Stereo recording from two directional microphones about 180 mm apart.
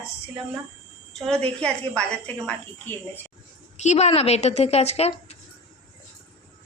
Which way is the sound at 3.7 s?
40° left (ahead or behind).